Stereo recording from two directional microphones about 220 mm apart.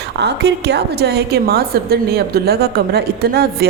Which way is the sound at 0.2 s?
50° right (ahead or behind).